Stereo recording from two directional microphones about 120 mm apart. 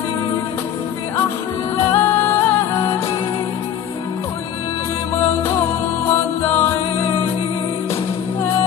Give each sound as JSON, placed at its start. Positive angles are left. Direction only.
{"t": 1.9, "sound": "music", "side_deg": 20}
{"t": 6.5, "sound": "music", "side_deg": 20}